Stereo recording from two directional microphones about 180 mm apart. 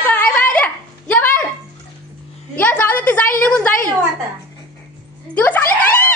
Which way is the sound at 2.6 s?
10° left (ahead or behind).